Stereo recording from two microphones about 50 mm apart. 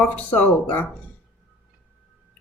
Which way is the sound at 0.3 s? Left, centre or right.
Left.